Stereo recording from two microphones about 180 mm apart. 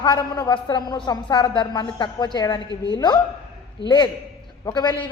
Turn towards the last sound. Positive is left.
turn(degrees=20)  # may be behind; listen again after turning